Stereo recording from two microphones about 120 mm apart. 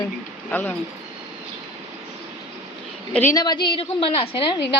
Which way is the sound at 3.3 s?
35° left (ahead or behind).